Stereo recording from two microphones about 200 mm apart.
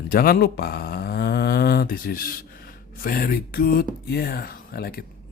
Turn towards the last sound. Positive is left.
turn(degrees=50)  # may be behind; listen again after turning